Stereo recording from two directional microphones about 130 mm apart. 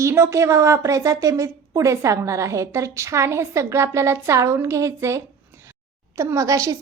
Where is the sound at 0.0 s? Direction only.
20° right (ahead or behind).